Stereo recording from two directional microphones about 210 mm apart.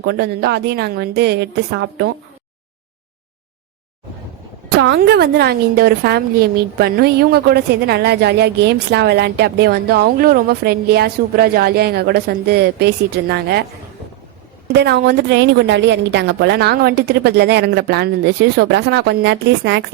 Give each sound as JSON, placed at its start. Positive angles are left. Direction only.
{"t": 0.0, "sound": "a woman's voice", "side_deg": -50}
{"t": 4.8, "sound": "a woman's voice", "side_deg": -55}
{"t": 14.7, "sound": "a woman's voice", "side_deg": -55}